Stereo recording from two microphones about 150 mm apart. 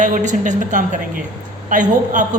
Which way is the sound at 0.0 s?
55° right (ahead or behind).